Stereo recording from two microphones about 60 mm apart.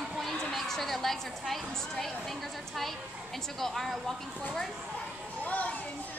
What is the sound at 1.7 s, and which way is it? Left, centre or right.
A woman's voice, centre.